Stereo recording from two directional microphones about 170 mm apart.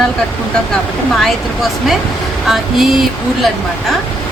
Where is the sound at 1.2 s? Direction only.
Centre (ahead or behind).